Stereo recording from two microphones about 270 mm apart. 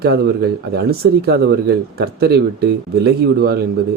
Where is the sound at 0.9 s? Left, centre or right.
Right.